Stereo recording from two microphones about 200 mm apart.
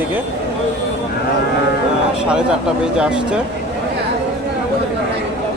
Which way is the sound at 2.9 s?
5° right (ahead or behind).